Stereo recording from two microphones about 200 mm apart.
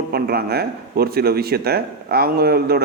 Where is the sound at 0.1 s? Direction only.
50° right (ahead or behind).